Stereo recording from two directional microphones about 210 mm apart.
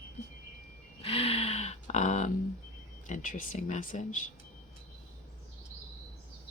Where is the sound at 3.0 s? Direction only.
40° left (ahead or behind).